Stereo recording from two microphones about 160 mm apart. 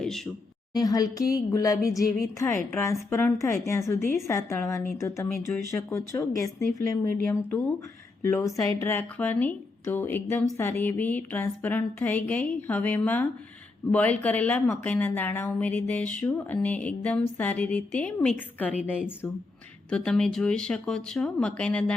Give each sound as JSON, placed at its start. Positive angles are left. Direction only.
{"t": 0.7, "sound": "a woman's voice", "side_deg": 25}
{"t": 8.2, "sound": "a woman's voice", "side_deg": 20}